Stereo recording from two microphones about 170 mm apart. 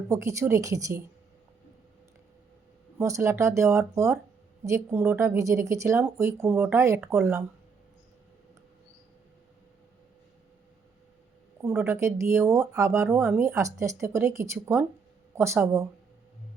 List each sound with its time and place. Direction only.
0.1 s speech: 15° right (ahead or behind)
3.0 s speech: 15° right (ahead or behind)
11.6 s speech: 15° right (ahead or behind)